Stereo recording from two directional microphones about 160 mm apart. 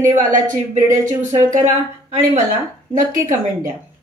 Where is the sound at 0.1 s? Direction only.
55° right (ahead or behind).